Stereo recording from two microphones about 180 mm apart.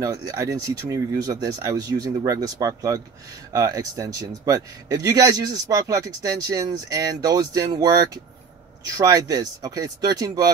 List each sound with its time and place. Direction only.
0.0 s speech: 20° right (ahead or behind)